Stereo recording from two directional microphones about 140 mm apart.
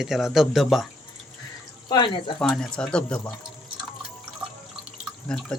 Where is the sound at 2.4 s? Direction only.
5° left (ahead or behind).